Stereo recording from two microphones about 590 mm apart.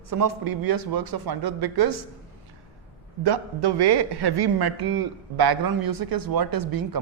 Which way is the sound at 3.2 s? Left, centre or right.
Right.